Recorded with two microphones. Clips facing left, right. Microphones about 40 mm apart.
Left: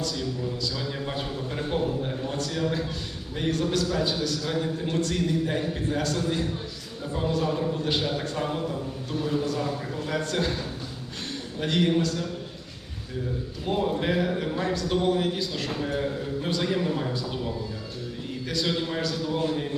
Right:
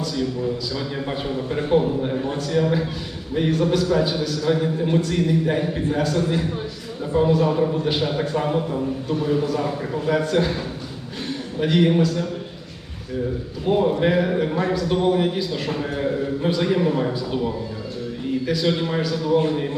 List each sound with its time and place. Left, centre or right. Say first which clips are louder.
0.0 s a man's voice: right 6 dB; centre
10.1 s a man's voice: right 8 dB; centre
11.3 s a sound: right 7 dB; centre
13.7 s a man's voice: right 7 dB; centre
14.7 s a man's voice: right 3 dB; centre
18.7 s a man's voice: right 5 dB; right